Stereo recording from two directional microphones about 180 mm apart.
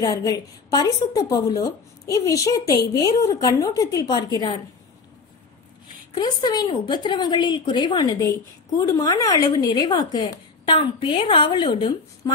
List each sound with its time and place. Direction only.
0.0 s a woman's voice: 20° left (ahead or behind)
6.1 s a woman's voice: 20° left (ahead or behind)